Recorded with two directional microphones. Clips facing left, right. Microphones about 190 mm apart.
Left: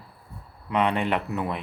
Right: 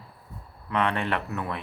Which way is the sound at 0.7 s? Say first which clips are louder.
Left 3 dB; 15° left (ahead or behind).